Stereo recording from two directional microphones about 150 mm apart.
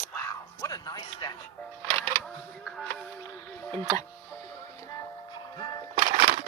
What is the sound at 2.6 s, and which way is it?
Music, 5° left (ahead or behind).